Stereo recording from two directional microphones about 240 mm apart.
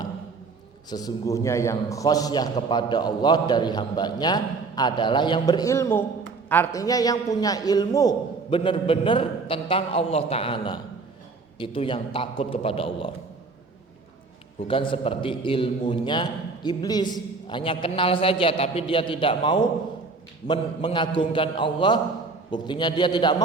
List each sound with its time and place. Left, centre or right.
0.9 s a man's voice: centre
14.7 s a man's voice: left